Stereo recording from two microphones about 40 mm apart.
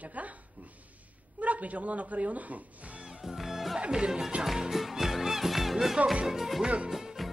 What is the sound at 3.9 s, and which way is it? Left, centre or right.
Speech, centre.